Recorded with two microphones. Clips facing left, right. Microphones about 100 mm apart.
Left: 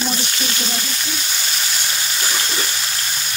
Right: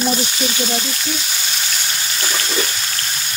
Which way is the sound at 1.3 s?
Centre (ahead or behind).